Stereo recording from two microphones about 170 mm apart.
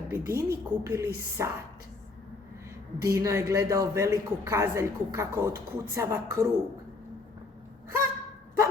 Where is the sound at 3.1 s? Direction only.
15° right (ahead or behind).